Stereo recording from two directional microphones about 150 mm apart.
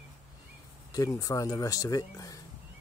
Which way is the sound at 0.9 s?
25° left (ahead or behind).